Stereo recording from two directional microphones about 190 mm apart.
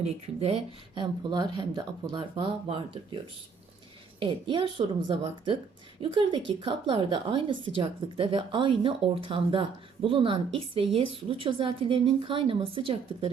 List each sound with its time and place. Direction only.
0.0 s a woman's voice: 30° right (ahead or behind)
4.2 s a woman's voice: 25° right (ahead or behind)